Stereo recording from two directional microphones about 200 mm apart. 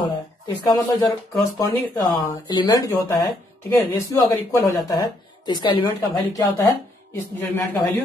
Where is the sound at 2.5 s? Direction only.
20° left (ahead or behind).